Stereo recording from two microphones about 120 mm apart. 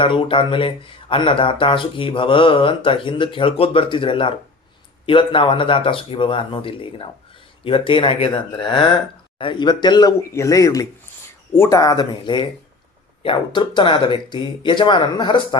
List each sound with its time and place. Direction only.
0.0 s speech: 45° left (ahead or behind)